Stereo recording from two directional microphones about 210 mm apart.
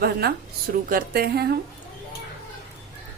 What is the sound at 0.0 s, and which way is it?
Speech, 45° right (ahead or behind).